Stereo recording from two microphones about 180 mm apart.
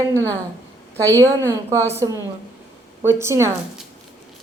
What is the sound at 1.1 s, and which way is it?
Speech, 15° right (ahead or behind).